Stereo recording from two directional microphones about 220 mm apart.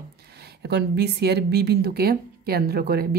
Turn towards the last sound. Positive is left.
turn(degrees=-45)  # may be behind; listen again after turning